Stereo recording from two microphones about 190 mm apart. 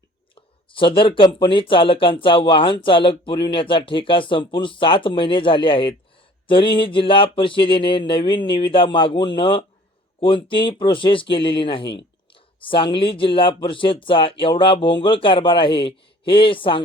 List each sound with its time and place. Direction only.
0.3 s speech: 25° left (ahead or behind)
12.3 s a sound: 25° left (ahead or behind)
13.1 s speech: 25° left (ahead or behind)